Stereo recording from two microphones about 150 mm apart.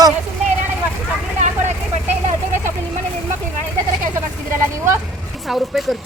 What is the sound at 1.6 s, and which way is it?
Vehicle, 50° right (ahead or behind).